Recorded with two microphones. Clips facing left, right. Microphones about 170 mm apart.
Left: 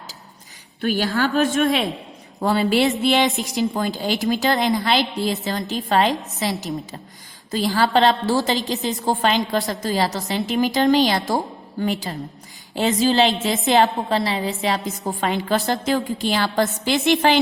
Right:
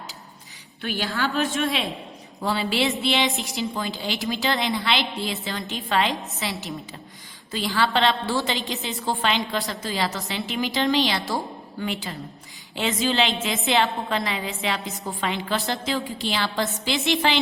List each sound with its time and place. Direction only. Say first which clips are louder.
0.8 s a woman's voice: left 6 dB; 40° left (ahead or behind)